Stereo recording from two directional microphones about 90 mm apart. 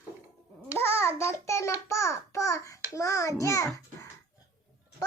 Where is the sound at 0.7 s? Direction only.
25° left (ahead or behind).